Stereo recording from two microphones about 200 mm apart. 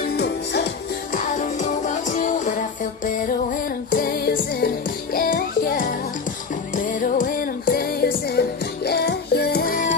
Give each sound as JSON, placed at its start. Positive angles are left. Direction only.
{"t": 0.1, "sound": "music", "side_deg": 55}
{"t": 1.1, "sound": "music", "side_deg": 40}
{"t": 3.9, "sound": "music", "side_deg": 45}